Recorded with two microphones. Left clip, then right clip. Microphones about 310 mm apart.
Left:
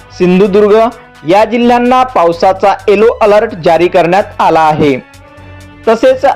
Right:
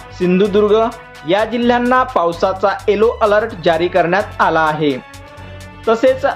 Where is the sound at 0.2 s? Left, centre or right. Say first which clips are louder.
Left 6 dB; left.